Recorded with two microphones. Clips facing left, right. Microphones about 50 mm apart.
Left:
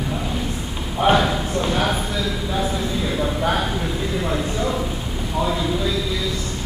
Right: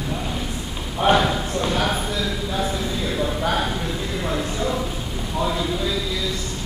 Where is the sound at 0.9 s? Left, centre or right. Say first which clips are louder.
Left 1 dB; centre.